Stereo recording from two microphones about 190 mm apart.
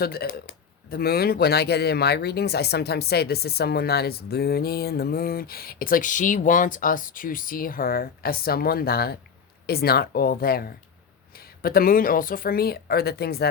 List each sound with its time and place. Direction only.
0.0 s speech: 55° left (ahead or behind)